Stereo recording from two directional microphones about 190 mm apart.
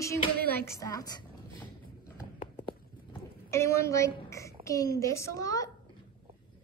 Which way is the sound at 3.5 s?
15° left (ahead or behind).